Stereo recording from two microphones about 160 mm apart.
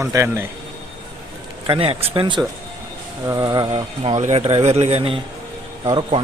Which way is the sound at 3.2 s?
20° right (ahead or behind).